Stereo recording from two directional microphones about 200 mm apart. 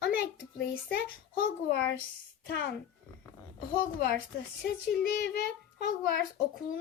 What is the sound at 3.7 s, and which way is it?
A woman's voice, 50° left (ahead or behind).